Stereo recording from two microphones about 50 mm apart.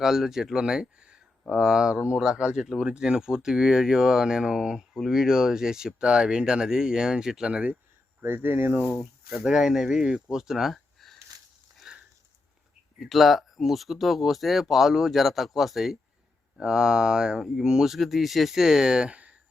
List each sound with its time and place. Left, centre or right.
0.0 s speech: centre
8.2 s speech: right
9.4 s speech: centre
11.9 s a sound: centre
13.0 s speech: centre
17.8 s speech: centre
19.1 s a sound: right